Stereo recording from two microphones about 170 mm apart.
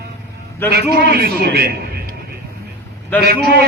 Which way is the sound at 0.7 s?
65° right (ahead or behind).